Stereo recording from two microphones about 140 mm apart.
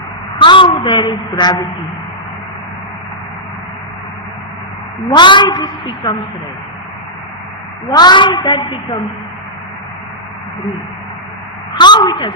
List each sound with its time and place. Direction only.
0.3 s a woman's voice: 35° left (ahead or behind)
5.0 s a woman's voice: 35° left (ahead or behind)
7.9 s a woman's voice: 30° left (ahead or behind)
11.8 s a sound: 30° left (ahead or behind)